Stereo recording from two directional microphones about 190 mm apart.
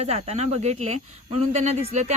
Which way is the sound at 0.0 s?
35° right (ahead or behind).